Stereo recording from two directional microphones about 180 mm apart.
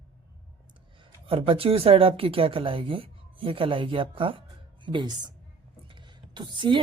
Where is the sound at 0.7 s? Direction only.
30° right (ahead or behind).